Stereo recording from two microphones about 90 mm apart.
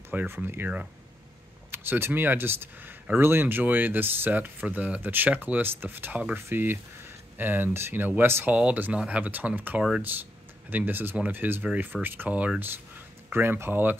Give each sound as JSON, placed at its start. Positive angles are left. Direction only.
{"t": 0.1, "sound": "speech", "side_deg": -20}